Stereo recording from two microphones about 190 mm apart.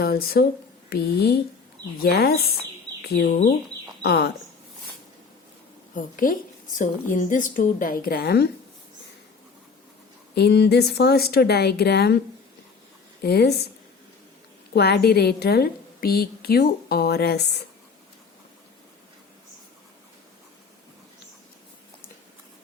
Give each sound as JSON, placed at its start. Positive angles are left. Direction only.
{"t": 0.0, "sound": "a woman's voice", "side_deg": 55}
{"t": 5.9, "sound": "a woman's voice", "side_deg": 45}
{"t": 10.3, "sound": "a woman's voice", "side_deg": 60}
{"t": 13.2, "sound": "a woman's voice", "side_deg": 55}
{"t": 14.7, "sound": "a woman's voice", "side_deg": 60}